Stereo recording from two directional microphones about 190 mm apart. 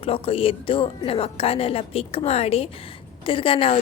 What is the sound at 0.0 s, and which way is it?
A woman's voice, 30° left (ahead or behind).